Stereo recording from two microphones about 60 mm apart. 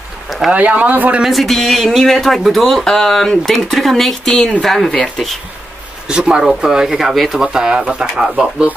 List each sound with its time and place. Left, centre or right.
0.5 s speech: right
1.2 s speech: centre
6.0 s speech: centre